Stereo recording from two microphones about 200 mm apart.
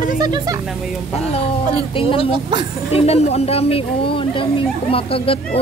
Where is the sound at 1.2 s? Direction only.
30° left (ahead or behind).